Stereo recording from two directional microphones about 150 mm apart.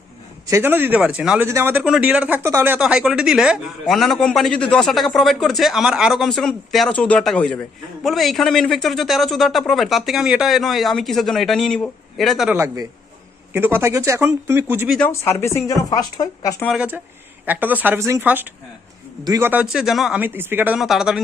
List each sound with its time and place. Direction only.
0.4 s speech: 15° right (ahead or behind)
2.7 s a man's voice: 5° right (ahead or behind)
12.5 s speech: 15° right (ahead or behind)
14.9 s speech: 10° left (ahead or behind)
17.4 s speech: 10° right (ahead or behind)
19.2 s a man's voice: 25° right (ahead or behind)
19.7 s a man's voice: centre (ahead or behind)
20.2 s speech: 15° right (ahead or behind)
20.7 s a man's voice: centre (ahead or behind)